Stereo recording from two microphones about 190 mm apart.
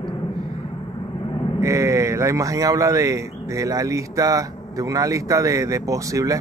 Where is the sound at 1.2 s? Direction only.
25° left (ahead or behind).